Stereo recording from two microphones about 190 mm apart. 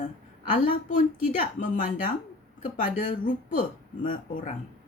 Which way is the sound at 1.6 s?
45° left (ahead or behind).